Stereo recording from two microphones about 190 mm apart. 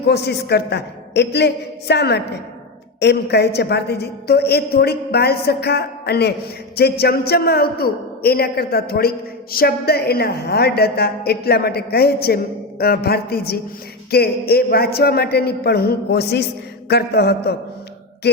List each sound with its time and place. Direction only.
0.0 s a man's voice: 60° left (ahead or behind)